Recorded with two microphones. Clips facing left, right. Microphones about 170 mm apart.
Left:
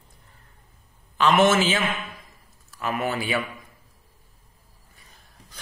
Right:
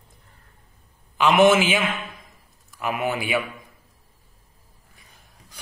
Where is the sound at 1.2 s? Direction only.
15° right (ahead or behind).